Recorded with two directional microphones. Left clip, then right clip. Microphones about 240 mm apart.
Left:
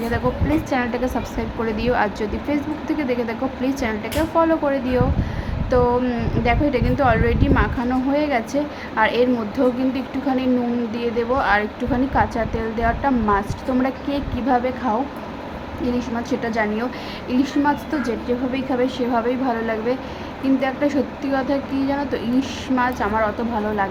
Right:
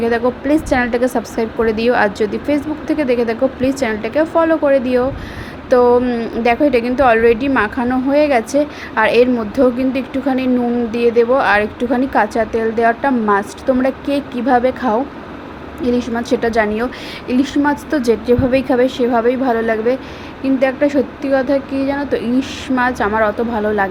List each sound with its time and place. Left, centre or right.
0.1 s a woman's voice: centre